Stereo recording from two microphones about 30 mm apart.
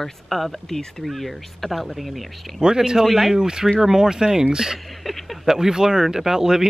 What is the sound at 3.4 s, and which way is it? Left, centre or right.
Speech, right.